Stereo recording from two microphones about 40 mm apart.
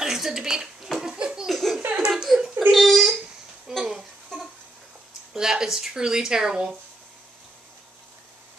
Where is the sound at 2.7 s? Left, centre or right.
Centre.